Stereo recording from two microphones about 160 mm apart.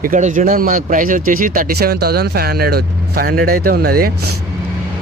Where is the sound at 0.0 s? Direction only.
55° right (ahead or behind).